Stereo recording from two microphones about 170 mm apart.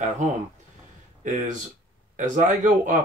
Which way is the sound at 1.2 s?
50° right (ahead or behind).